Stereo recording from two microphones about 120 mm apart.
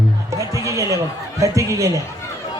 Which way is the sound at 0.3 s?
25° right (ahead or behind).